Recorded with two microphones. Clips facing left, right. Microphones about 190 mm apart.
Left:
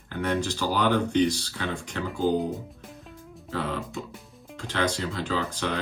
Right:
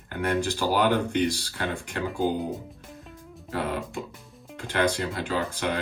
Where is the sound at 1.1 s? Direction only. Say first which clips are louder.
Left 2 dB; 55° right (ahead or behind).